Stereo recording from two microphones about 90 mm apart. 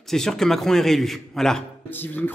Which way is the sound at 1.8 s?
20° left (ahead or behind).